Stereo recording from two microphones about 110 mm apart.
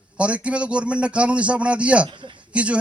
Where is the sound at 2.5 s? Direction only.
10° right (ahead or behind).